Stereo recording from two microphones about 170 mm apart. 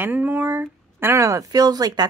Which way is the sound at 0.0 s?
10° right (ahead or behind).